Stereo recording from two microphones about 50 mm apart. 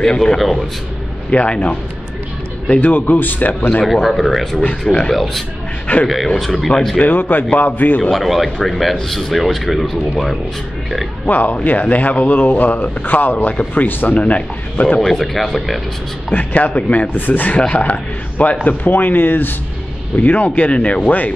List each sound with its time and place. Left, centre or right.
0.0 s speech: centre
1.3 s a man's voice: left
2.8 s speech: left
3.8 s speech: centre
4.6 s speech: centre
5.1 s speech: centre
7.0 s speech: left
8.1 s speech: centre
11.2 s speech: left
15.0 s speech: centre
16.3 s speech: left